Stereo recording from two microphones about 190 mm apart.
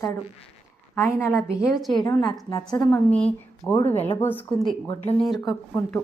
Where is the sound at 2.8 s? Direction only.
5° left (ahead or behind).